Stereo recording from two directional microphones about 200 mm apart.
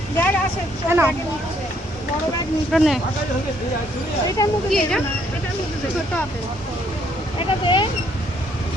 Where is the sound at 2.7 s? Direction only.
Centre (ahead or behind).